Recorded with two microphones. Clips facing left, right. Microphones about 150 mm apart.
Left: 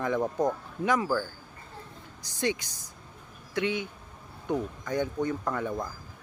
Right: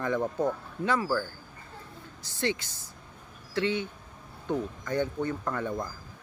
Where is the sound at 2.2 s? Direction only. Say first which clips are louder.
Left 1 dB; 15° left (ahead or behind).